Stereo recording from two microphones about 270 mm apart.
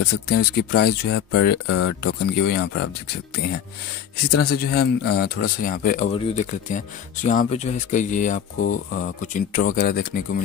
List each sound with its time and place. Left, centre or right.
0.0 s speech: left
8.5 s speech: left
9.2 s speech: left